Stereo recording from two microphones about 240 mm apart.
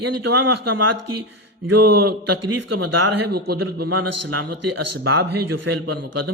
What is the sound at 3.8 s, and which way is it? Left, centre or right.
Speech, right.